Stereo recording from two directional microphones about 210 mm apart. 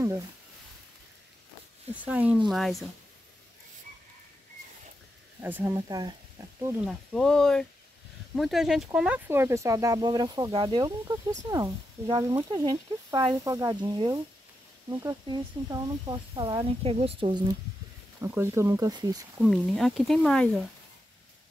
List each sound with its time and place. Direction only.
2.0 s speech: 5° right (ahead or behind)
5.4 s speech: 10° right (ahead or behind)
19.4 s speech: centre (ahead or behind)